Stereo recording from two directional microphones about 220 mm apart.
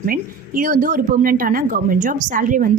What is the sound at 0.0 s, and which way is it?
A woman's voice, 40° right (ahead or behind).